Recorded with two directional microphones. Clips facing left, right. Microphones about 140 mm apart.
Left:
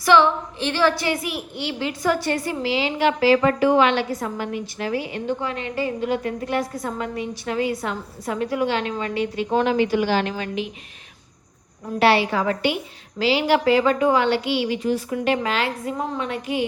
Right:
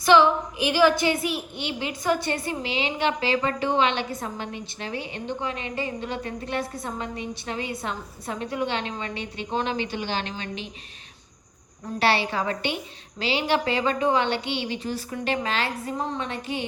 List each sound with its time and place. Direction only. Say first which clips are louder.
0.0 s a woman's voice: left 1 dB; 15° right (ahead or behind)
11.9 s a woman's voice: left 5 dB; 30° right (ahead or behind)